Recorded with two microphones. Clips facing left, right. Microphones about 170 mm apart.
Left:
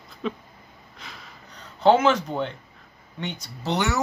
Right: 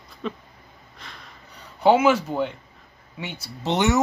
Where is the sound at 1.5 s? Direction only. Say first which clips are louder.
Even; 10° right (ahead or behind).